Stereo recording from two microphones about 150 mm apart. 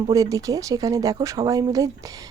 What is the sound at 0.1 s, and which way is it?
Speech, 25° right (ahead or behind).